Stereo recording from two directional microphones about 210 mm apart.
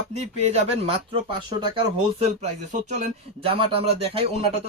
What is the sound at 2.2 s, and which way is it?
Speech, 35° right (ahead or behind).